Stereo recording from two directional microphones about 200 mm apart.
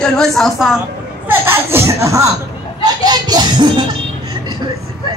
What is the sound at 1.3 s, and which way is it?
Speech, 10° right (ahead or behind).